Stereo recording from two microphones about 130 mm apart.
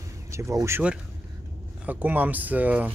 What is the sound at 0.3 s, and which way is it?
Speech, 25° right (ahead or behind).